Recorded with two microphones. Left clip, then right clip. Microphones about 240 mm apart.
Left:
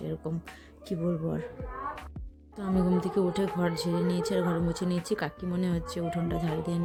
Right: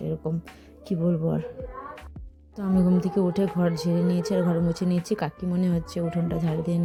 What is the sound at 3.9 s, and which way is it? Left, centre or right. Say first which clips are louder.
Speech: right 3 dB; left.